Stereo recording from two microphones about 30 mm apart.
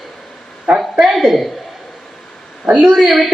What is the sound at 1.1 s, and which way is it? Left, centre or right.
Speech, centre.